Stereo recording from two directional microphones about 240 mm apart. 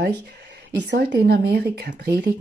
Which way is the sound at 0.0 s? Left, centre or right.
Right.